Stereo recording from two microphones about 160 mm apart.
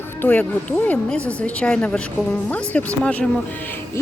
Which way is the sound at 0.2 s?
10° left (ahead or behind).